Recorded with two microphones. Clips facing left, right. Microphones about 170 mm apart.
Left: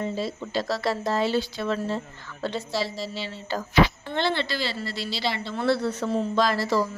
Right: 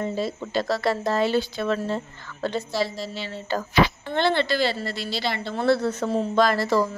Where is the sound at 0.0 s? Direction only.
50° right (ahead or behind).